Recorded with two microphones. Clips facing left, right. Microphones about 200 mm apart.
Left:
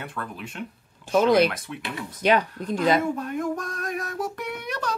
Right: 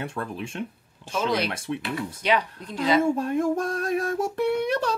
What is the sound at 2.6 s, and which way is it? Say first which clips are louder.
Speech: left 2 dB; 50° left (ahead or behind).